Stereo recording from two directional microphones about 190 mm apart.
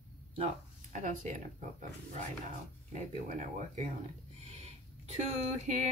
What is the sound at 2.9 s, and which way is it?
Music, 40° right (ahead or behind).